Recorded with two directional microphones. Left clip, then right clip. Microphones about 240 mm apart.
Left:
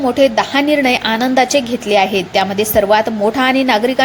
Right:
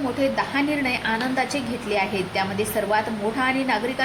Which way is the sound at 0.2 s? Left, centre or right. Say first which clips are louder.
Left 10 dB; left.